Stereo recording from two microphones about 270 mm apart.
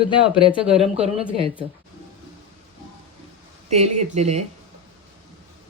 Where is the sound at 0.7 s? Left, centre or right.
Right.